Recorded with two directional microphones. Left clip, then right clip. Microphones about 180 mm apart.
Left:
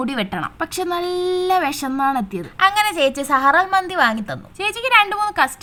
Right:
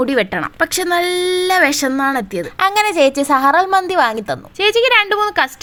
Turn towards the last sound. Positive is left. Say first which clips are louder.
# right 3 dB
turn(degrees=-20)  # may be behind; listen again after turning